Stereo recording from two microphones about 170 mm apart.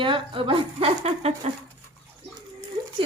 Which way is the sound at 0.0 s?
30° right (ahead or behind).